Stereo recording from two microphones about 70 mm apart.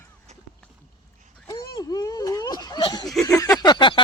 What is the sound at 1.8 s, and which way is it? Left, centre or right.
Whimper, left.